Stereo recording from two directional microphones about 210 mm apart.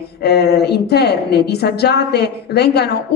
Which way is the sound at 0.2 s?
50° left (ahead or behind).